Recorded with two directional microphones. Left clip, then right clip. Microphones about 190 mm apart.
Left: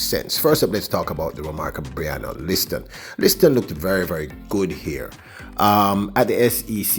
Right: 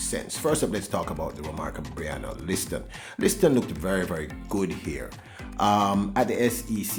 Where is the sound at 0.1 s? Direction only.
35° left (ahead or behind).